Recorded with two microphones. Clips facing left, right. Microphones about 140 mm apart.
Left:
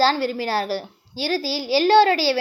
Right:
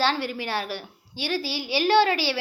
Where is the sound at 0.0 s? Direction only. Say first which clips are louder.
Left 6 dB; 35° left (ahead or behind).